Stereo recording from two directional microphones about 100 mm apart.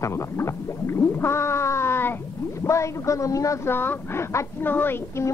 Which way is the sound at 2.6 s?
30° left (ahead or behind).